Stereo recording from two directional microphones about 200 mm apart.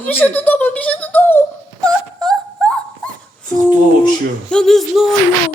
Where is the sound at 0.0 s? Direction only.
10° left (ahead or behind).